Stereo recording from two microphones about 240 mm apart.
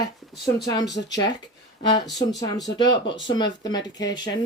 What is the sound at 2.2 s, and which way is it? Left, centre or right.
Speech, centre.